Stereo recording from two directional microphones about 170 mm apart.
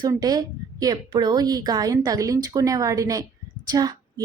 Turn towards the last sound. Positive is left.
turn(degrees=-25)  # may be behind; listen again after turning